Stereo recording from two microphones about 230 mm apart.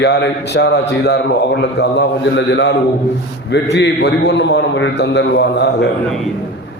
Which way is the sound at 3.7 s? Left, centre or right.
Left.